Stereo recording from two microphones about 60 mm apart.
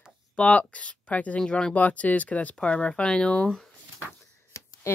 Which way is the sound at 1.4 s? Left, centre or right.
Centre.